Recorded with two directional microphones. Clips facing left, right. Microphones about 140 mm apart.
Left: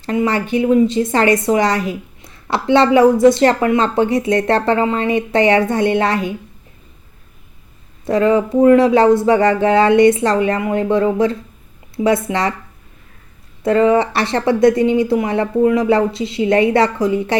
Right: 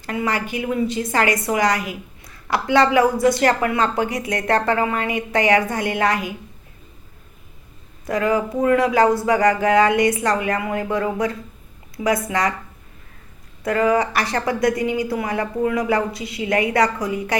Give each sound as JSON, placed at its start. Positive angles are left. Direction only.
{"t": 0.0, "sound": "a woman's voice", "side_deg": 25}
{"t": 8.0, "sound": "a woman's voice", "side_deg": 25}
{"t": 13.6, "sound": "a woman's voice", "side_deg": 25}